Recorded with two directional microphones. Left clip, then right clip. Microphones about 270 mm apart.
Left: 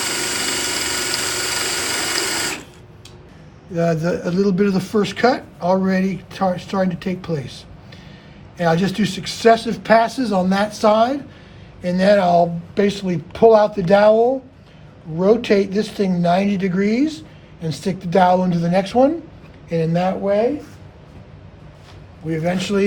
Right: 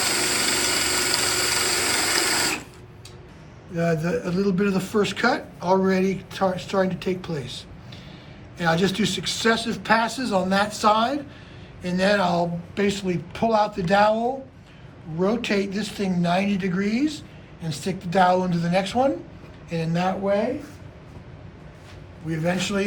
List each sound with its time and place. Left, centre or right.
0.0 s a sound: centre
3.8 s speech: left
15.2 s speech: left
22.3 s speech: left